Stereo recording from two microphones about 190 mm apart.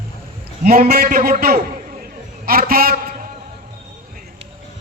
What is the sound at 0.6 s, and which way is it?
A man's voice, 50° right (ahead or behind).